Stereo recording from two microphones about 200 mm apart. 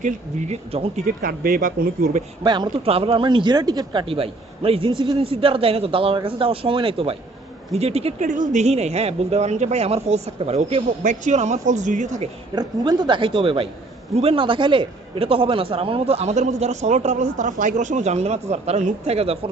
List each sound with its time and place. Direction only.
0.0 s a man's voice: 35° right (ahead or behind)
1.0 s speech: 50° right (ahead or behind)
2.4 s a man's voice: 25° right (ahead or behind)
12.5 s a man's voice: 20° right (ahead or behind)